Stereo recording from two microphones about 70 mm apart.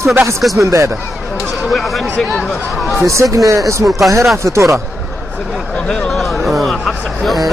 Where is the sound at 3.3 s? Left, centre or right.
Right.